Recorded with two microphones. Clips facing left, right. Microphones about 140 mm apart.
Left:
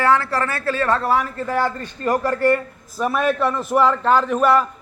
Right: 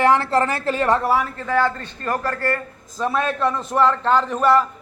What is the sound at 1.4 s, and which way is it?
A man's voice, 10° left (ahead or behind).